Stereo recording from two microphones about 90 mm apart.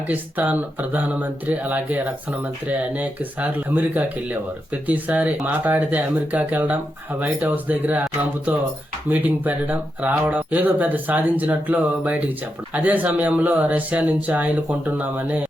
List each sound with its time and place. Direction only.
0.1 s speech: 15° right (ahead or behind)
9.0 s speech: 20° right (ahead or behind)